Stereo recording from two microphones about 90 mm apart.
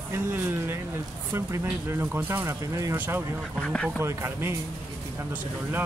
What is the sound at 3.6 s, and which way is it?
Speech, 10° left (ahead or behind).